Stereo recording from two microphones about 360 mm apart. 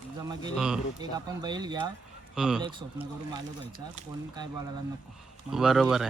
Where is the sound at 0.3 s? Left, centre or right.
Centre.